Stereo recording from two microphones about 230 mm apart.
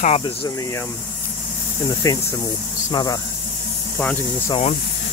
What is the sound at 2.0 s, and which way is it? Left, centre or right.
Speech, centre.